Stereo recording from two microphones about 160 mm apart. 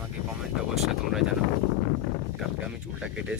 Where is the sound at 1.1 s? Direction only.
Centre (ahead or behind).